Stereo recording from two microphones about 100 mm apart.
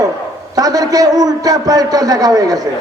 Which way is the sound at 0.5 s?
40° right (ahead or behind).